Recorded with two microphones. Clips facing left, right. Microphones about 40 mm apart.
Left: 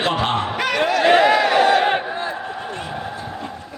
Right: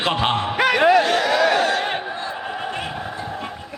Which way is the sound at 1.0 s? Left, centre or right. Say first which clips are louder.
Left 4 dB; left.